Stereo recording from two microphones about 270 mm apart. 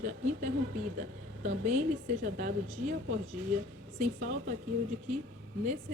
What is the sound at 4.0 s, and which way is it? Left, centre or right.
Speech, right.